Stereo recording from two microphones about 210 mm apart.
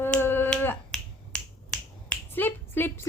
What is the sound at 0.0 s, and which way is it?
Finger snapping, 10° left (ahead or behind).